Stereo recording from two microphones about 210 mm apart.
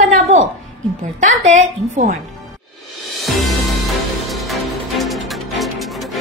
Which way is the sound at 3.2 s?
Centre (ahead or behind).